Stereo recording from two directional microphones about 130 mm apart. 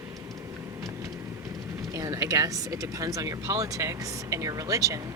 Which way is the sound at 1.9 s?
25° right (ahead or behind).